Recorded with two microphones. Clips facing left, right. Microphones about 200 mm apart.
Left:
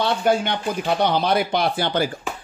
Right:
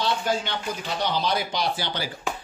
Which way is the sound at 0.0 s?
55° left (ahead or behind).